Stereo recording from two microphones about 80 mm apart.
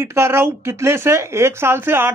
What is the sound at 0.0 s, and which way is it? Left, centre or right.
Speech, right.